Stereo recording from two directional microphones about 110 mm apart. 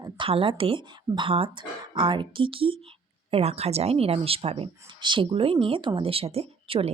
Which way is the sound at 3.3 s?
70° right (ahead or behind).